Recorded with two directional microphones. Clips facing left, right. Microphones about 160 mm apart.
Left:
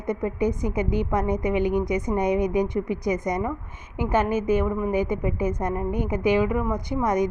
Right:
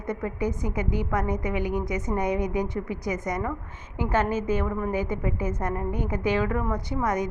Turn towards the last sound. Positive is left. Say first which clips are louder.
# left 4 dB
turn(degrees=20)  # may be behind; listen again after turning